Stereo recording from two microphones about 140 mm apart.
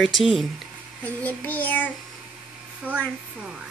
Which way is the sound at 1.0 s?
10° left (ahead or behind).